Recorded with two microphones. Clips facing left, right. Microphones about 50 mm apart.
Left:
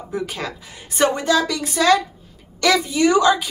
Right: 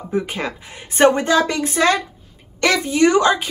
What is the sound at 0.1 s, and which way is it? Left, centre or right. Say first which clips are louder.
Speech: right 4 dB; right.